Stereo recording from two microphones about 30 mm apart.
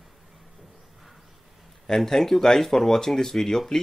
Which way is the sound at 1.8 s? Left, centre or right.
Centre.